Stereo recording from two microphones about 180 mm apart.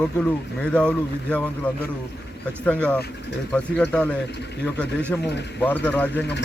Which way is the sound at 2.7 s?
5° left (ahead or behind).